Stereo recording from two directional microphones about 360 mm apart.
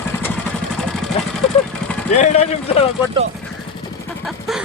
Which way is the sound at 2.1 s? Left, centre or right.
Centre.